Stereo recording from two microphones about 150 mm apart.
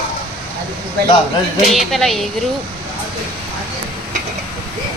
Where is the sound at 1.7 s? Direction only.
Centre (ahead or behind).